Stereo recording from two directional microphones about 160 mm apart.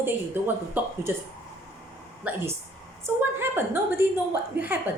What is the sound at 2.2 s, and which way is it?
A woman's voice, 15° right (ahead or behind).